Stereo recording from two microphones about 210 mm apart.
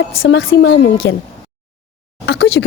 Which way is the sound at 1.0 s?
15° left (ahead or behind).